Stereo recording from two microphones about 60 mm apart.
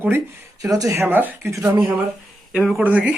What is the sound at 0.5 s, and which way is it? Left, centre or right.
Speech, right.